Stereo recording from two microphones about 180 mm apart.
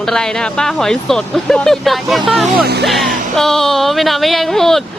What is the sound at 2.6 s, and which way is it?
Speech, 65° right (ahead or behind).